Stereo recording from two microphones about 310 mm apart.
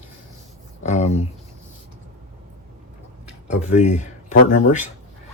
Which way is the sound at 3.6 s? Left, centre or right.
Left.